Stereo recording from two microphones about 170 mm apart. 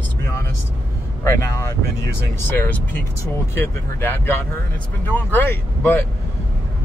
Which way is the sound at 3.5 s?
10° left (ahead or behind).